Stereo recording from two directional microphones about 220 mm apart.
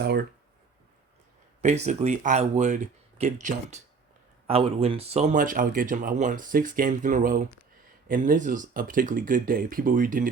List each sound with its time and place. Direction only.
1.6 s speech: 30° right (ahead or behind)